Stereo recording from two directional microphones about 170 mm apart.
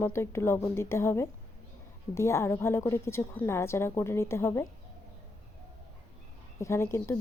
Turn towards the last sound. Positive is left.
turn(degrees=15)  # may be behind; listen again after turning